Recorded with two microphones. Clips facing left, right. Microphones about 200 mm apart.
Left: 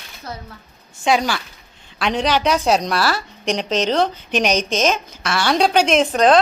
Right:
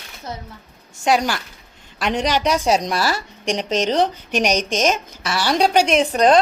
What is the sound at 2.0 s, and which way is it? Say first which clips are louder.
A woman's voice: left 1 dB; 15° right (ahead or behind).